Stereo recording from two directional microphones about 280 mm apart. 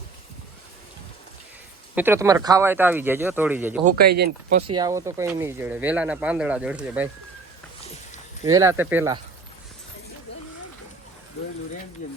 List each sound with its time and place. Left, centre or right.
2.0 s speech: centre
3.8 s speech: right
4.6 s speech: centre
7.8 s a sound: left
8.4 s speech: centre